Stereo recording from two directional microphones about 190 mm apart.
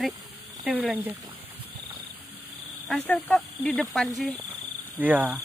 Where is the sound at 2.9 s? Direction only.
Centre (ahead or behind).